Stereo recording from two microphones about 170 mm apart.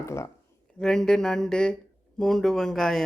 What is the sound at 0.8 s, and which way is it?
Speech, 5° left (ahead or behind).